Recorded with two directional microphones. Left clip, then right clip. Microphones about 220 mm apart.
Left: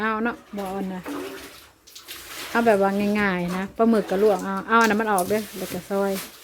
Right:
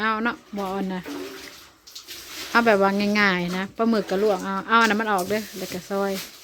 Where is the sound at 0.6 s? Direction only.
20° right (ahead or behind).